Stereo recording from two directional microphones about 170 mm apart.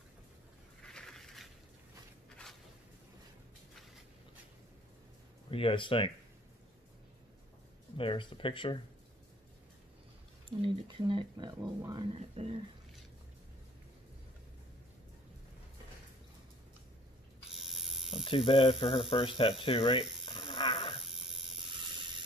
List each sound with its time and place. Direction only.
0.8 s a sound: 5° left (ahead or behind)
5.5 s speech: 30° left (ahead or behind)
8.0 s speech: 30° left (ahead or behind)
10.6 s speech: 30° right (ahead or behind)
17.5 s ratchet: centre (ahead or behind)
18.2 s speech: 30° left (ahead or behind)
20.3 s dog: 30° left (ahead or behind)
21.0 s a sound: centre (ahead or behind)